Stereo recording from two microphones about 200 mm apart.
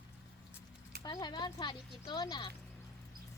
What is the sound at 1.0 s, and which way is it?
Speech, 20° left (ahead or behind).